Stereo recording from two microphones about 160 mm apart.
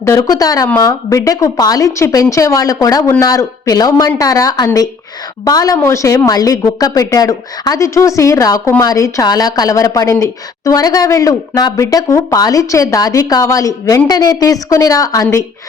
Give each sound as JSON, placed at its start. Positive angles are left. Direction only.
{"t": 0.0, "sound": "a woman's voice", "side_deg": 20}